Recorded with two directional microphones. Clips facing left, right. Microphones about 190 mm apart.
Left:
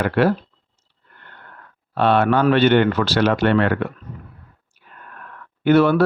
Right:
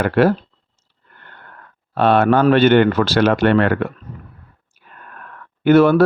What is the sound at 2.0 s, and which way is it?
Speech, 45° right (ahead or behind).